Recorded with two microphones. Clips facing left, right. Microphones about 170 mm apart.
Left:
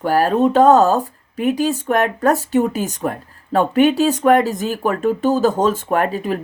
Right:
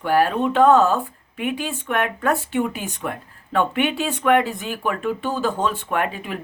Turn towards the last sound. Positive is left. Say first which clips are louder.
# left 6 dB
turn(degrees=40)  # may be behind; listen again after turning